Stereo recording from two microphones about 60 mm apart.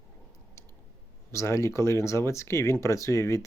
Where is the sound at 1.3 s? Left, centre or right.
Left.